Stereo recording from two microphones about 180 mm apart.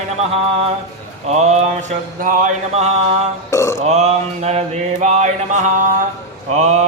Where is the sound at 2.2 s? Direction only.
50° right (ahead or behind).